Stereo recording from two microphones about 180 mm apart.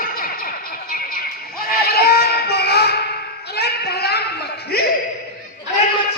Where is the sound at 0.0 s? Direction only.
55° left (ahead or behind).